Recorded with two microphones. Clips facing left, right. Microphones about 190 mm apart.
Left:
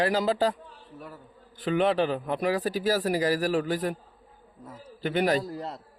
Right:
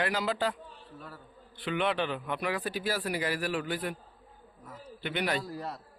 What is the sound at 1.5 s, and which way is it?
A man's voice, 40° left (ahead or behind).